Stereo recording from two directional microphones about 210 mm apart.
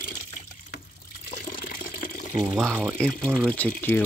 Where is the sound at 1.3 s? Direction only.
40° left (ahead or behind).